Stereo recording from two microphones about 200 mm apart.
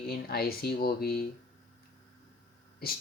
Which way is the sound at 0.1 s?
50° left (ahead or behind).